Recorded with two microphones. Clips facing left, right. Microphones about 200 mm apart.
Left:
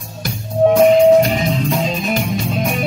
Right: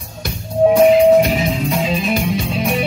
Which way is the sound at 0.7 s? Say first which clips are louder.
Even; 5° right (ahead or behind).